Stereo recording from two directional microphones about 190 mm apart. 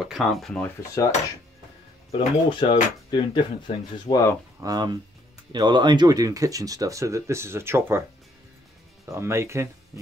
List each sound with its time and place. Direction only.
0.0 s speech: centre (ahead or behind)
2.0 s speech: 25° left (ahead or behind)
4.6 s speech: 20° right (ahead or behind)
9.1 s speech: 15° right (ahead or behind)